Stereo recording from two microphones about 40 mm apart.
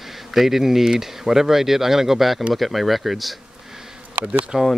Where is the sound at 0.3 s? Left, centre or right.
Centre.